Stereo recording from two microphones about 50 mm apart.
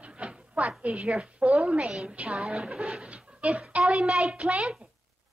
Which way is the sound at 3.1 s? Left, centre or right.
Right.